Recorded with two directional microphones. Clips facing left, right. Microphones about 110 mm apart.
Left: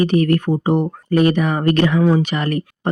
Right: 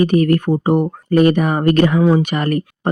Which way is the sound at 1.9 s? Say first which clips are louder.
Right 2 dB; 20° right (ahead or behind).